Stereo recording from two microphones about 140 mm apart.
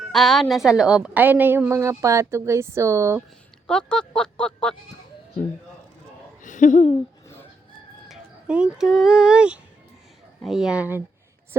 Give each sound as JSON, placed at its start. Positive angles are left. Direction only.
{"t": 0.1, "sound": "a woman's voice", "side_deg": 0}
{"t": 3.7, "sound": "a sound", "side_deg": 5}
{"t": 6.4, "sound": "speech", "side_deg": 65}
{"t": 8.0, "sound": "a woman's voice", "side_deg": -5}